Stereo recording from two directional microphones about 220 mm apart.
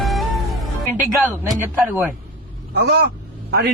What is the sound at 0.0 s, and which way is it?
Music, centre (ahead or behind).